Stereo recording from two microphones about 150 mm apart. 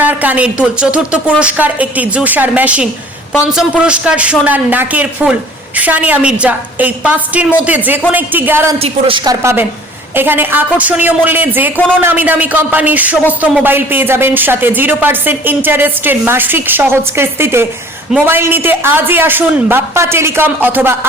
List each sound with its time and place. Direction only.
0.0 s speech: 10° right (ahead or behind)
8.8 s a woman's voice: 35° right (ahead or behind); by 21.1 s 15° right (ahead or behind)